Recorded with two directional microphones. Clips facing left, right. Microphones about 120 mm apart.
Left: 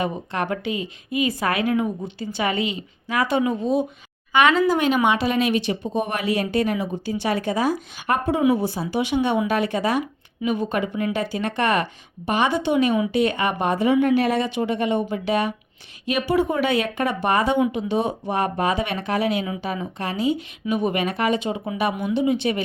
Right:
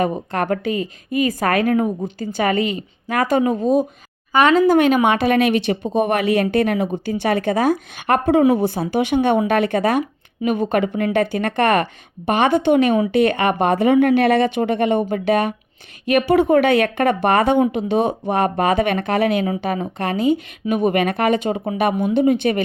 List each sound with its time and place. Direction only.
0.0 s a woman's voice: 45° right (ahead or behind)
4.7 s a woman's voice: 55° right (ahead or behind)